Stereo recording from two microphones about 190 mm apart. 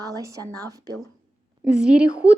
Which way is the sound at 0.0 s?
15° right (ahead or behind).